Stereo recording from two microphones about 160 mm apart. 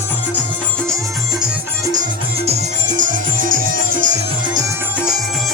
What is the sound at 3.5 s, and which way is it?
Music, 60° right (ahead or behind).